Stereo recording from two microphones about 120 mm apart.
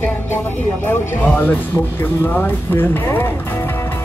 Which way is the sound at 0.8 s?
15° left (ahead or behind).